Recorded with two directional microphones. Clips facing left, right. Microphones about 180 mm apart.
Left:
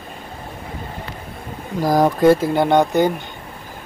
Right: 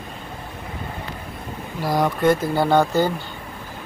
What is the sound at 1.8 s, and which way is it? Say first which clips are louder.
Speech: left 5 dB; 45° left (ahead or behind).